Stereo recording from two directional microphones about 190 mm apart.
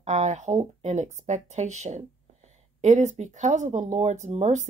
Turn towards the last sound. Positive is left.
turn(degrees=-35)  # may be behind; listen again after turning